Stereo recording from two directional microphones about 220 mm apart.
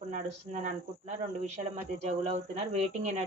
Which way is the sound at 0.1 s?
35° right (ahead or behind).